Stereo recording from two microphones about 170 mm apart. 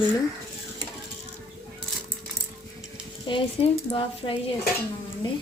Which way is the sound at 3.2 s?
30° left (ahead or behind).